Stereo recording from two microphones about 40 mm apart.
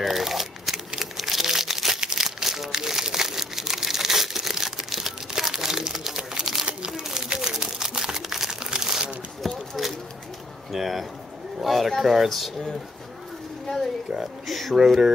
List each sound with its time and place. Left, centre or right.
0.0 s crumpling: centre
9.8 s a sound: centre
11.6 s bird: centre
12.0 s speech: centre
14.1 s speech: centre